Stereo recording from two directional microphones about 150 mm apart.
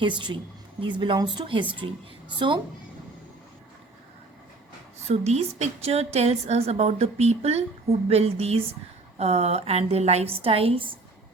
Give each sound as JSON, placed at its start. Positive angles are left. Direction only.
{"t": 0.0, "sound": "speech", "side_deg": -30}
{"t": 5.0, "sound": "a woman's voice", "side_deg": -45}